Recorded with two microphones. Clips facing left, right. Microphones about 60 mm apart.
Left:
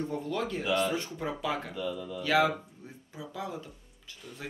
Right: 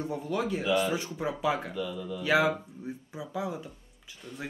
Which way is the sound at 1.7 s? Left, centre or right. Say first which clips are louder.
Right 1 dB; centre.